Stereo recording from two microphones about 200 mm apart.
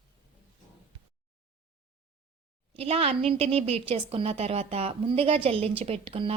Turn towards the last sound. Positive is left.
turn(degrees=-30)  # may be behind; listen again after turning